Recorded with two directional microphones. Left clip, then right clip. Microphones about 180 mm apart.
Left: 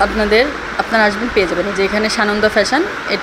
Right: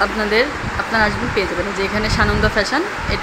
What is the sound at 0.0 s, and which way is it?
Speech, 25° left (ahead or behind).